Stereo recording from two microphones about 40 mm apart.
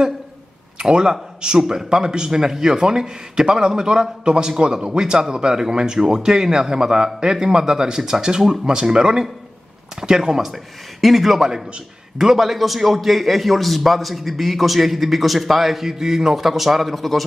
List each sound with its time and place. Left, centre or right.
0.8 s a man's voice: centre